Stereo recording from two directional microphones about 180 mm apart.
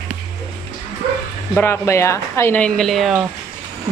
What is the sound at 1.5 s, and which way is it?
A woman's voice, 15° left (ahead or behind).